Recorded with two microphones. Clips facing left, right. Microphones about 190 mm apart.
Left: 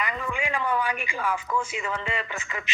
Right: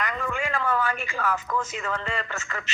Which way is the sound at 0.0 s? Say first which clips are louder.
Right 1 dB; 5° left (ahead or behind).